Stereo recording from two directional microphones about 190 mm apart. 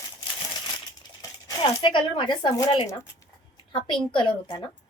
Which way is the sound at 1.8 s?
25° left (ahead or behind).